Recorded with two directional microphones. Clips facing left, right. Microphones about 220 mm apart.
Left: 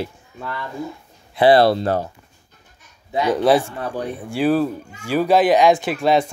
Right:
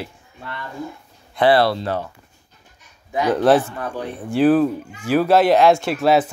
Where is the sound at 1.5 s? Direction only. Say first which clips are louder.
Left 3 dB; 45° left (ahead or behind).